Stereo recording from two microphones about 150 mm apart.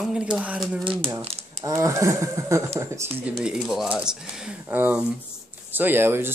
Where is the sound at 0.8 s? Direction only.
35° right (ahead or behind).